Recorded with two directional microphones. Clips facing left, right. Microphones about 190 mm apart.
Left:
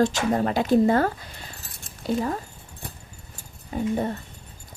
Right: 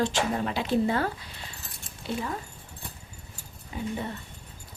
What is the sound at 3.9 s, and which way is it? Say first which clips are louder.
Speech: left 9 dB; 45° left (ahead or behind).